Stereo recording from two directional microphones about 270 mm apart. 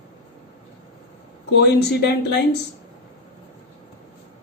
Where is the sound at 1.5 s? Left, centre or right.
Left.